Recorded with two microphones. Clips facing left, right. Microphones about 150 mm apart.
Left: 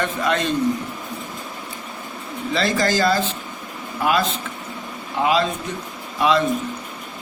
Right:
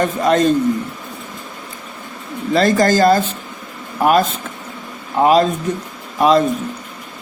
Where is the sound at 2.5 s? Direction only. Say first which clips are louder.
Right 7 dB; 45° right (ahead or behind).